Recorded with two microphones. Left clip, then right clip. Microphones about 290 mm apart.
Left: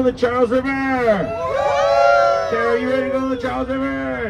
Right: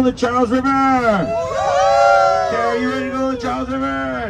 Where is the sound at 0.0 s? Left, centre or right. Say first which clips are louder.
Even; right.